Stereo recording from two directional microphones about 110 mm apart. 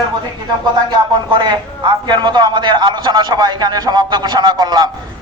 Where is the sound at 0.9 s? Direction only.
45° right (ahead or behind).